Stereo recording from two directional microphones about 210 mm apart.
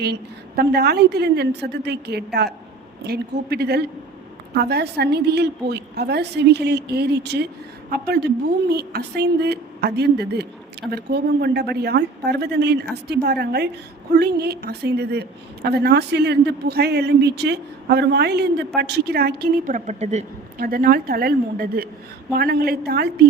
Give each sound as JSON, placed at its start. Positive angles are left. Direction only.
{"t": 0.0, "sound": "a woman's voice", "side_deg": -50}